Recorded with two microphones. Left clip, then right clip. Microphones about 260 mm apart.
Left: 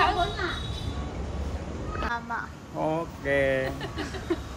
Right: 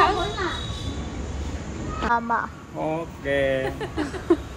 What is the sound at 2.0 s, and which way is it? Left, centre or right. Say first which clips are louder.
Speech: right 9 dB; centre.